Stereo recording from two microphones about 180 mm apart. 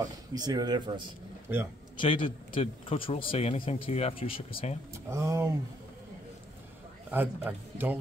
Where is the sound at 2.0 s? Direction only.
30° left (ahead or behind).